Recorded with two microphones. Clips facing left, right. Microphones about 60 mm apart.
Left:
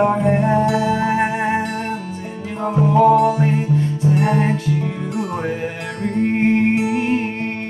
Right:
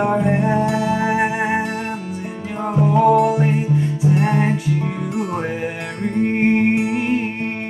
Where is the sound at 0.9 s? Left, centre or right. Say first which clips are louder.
Even; centre.